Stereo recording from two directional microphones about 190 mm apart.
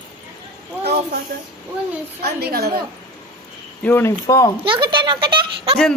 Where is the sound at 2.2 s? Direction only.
55° right (ahead or behind).